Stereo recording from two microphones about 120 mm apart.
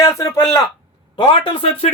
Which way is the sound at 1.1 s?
40° left (ahead or behind).